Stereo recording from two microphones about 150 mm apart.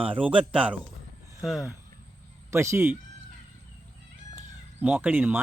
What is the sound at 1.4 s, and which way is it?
Speech, centre (ahead or behind).